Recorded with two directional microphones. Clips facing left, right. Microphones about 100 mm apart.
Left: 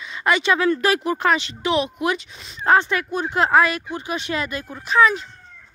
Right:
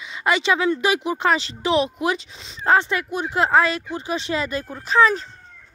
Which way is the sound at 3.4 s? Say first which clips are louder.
Left 1 dB; 25° right (ahead or behind).